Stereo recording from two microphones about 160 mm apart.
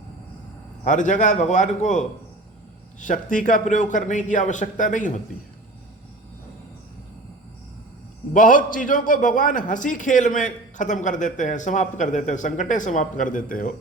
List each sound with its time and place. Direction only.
0.9 s a man's voice: 50° left (ahead or behind)
8.3 s a man's voice: 55° left (ahead or behind)